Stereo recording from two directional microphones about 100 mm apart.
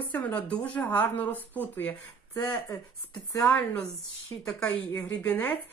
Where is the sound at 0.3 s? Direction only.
10° left (ahead or behind).